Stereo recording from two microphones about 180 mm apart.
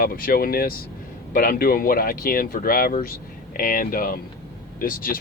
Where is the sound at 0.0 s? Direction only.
55° left (ahead or behind).